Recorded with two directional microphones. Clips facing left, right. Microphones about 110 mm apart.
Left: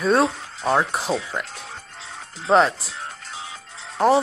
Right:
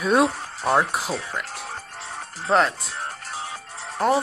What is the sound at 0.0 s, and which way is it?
Speech, 10° right (ahead or behind).